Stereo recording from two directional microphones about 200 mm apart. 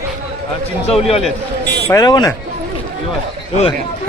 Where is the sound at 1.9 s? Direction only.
20° left (ahead or behind).